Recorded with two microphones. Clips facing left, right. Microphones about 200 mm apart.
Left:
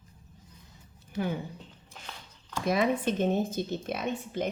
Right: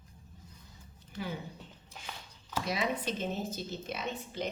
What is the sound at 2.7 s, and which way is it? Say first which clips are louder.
Speech: left 8 dB; 50° left (ahead or behind).